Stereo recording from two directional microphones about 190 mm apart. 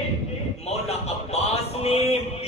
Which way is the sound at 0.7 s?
35° left (ahead or behind).